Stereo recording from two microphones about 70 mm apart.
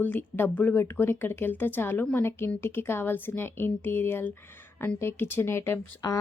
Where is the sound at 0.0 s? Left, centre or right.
Left.